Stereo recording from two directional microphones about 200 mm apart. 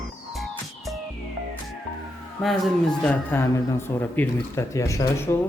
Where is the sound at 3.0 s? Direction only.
10° left (ahead or behind).